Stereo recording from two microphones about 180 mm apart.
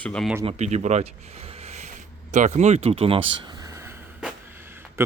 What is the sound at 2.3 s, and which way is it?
Speech, 40° right (ahead or behind).